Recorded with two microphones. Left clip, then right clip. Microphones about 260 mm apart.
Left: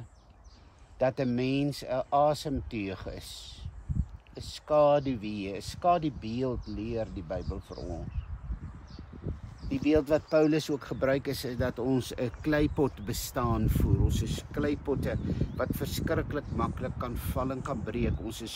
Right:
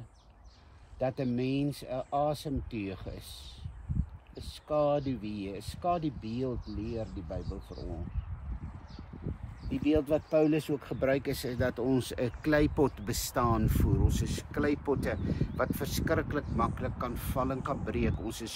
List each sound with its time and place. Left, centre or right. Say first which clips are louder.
0.9 s speech: left 4 dB; centre
9.7 s speech: left 3 dB; centre